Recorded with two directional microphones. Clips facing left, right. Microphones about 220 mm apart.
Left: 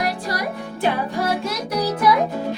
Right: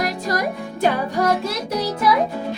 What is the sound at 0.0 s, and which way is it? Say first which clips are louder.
Music: right 2 dB; 45° right (ahead or behind).